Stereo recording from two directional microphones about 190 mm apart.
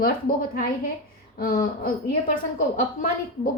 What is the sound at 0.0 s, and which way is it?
A woman's voice, 50° left (ahead or behind).